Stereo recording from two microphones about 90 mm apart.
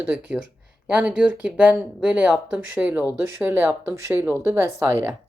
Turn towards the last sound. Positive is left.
turn(degrees=-30)  # may be behind; listen again after turning